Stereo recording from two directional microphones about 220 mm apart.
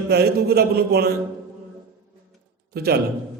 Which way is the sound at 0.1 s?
45° right (ahead or behind).